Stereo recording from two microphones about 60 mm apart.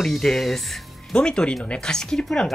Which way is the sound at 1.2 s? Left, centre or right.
Centre.